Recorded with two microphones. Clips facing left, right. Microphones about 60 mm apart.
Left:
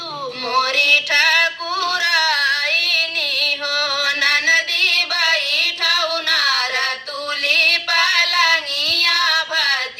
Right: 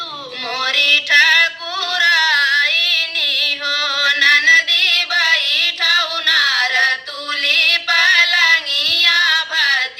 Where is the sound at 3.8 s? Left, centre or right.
Right.